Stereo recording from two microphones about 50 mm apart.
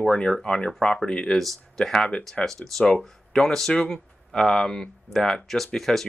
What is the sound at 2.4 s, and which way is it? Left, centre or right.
Speech, centre.